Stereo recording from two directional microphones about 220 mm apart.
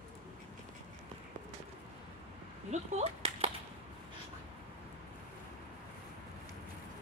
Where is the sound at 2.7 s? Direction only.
30° right (ahead or behind).